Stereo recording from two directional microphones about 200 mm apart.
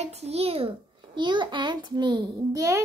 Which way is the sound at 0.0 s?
30° right (ahead or behind).